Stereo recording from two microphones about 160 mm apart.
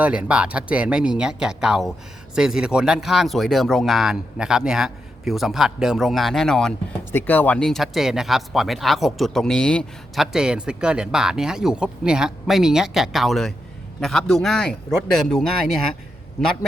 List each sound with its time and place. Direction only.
0.0 s speech: 10° right (ahead or behind)
10.3 s speech: 5° right (ahead or behind)